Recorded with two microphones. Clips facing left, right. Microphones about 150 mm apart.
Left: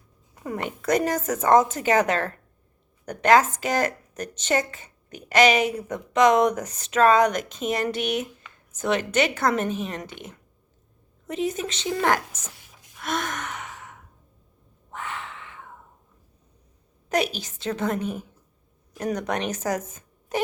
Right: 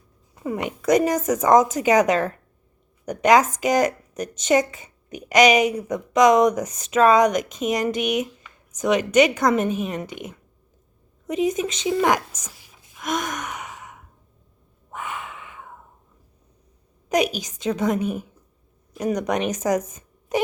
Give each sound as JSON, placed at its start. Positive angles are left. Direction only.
{"t": 0.3, "sound": "speech", "side_deg": -5}
{"t": 12.4, "sound": "a sound", "side_deg": -5}
{"t": 13.0, "sound": "gasp", "side_deg": -15}
{"t": 14.9, "sound": "a sound", "side_deg": -15}
{"t": 17.1, "sound": "speech", "side_deg": -10}
{"t": 19.5, "sound": "speech", "side_deg": -15}